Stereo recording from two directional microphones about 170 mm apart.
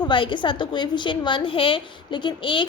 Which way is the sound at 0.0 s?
30° left (ahead or behind).